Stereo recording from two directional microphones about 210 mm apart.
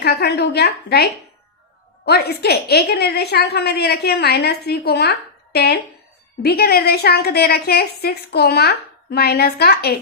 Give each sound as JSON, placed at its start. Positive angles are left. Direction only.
{"t": 0.0, "sound": "a woman's voice", "side_deg": 50}